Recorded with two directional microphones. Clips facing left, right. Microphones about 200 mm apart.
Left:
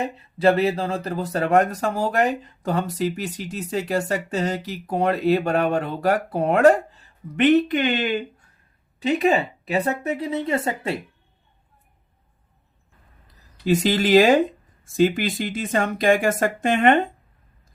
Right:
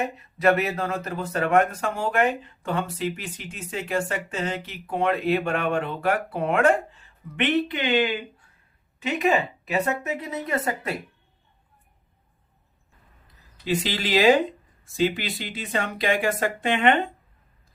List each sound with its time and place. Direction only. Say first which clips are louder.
0.0 s speech: left 3 dB; 30° left (ahead or behind); by 8.1 s 45° left (ahead or behind)
9.0 s speech: left 3 dB; 35° left (ahead or behind)
13.7 s speech: left 7 dB; 45° left (ahead or behind)